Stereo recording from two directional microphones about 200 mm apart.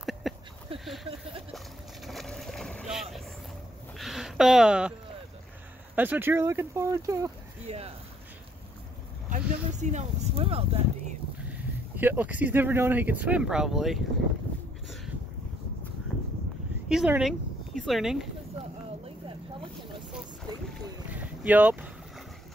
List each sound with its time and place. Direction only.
0.2 s a sound: centre (ahead or behind)
2.0 s boat: centre (ahead or behind)
4.0 s a sound: centre (ahead or behind)
5.9 s speech: 10° right (ahead or behind)
7.6 s speech: 30° right (ahead or behind)
9.3 s speech: 35° right (ahead or behind)
11.5 s speech: 10° right (ahead or behind)
16.9 s speech: 5° right (ahead or behind)
19.0 s vehicle: 25° right (ahead or behind)
21.1 s boat: 5° right (ahead or behind)